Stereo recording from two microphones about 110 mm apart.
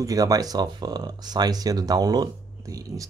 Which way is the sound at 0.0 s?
35° right (ahead or behind).